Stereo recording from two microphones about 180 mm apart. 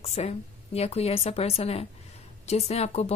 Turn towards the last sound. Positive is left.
turn(degrees=35)  # may be behind; listen again after turning